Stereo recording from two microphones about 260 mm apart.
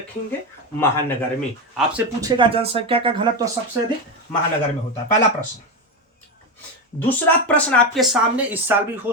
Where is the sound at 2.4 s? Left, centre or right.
Right.